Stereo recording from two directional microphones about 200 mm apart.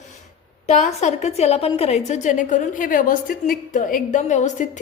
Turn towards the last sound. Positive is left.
turn(degrees=35)  # may be behind; listen again after turning